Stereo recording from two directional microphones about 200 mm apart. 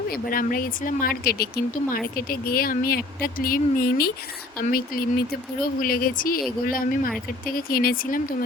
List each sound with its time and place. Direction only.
0.1 s speech: 45° left (ahead or behind)